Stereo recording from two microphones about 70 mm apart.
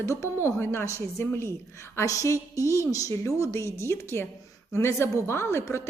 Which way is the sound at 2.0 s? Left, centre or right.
Left.